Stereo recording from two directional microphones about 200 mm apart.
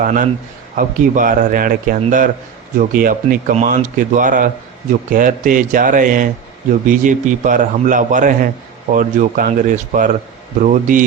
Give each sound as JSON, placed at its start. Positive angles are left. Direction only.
{"t": 0.0, "sound": "a man's voice", "side_deg": -40}